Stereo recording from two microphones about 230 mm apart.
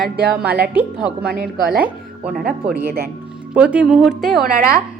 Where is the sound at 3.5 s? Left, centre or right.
Centre.